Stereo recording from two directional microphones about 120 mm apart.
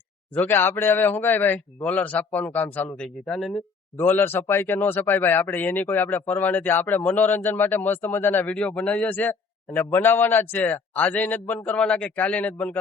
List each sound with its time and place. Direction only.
0.3 s speech: 20° left (ahead or behind)
3.9 s speech: 15° left (ahead or behind)